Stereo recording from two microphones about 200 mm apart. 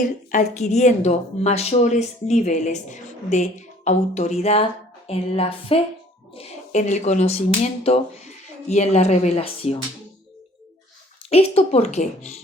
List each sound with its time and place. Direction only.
0.0 s a woman's voice: 35° left (ahead or behind)
11.3 s a woman's voice: 30° left (ahead or behind)